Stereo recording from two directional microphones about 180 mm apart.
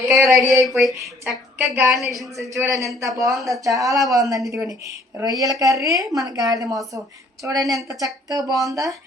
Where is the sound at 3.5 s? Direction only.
20° right (ahead or behind).